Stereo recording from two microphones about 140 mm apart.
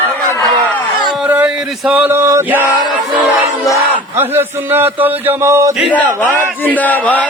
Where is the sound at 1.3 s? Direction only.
10° right (ahead or behind).